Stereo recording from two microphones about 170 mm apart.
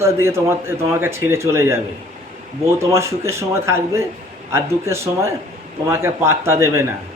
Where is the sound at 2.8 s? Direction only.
15° right (ahead or behind).